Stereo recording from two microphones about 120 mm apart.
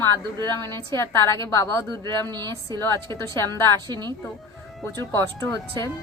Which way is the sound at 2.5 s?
25° left (ahead or behind).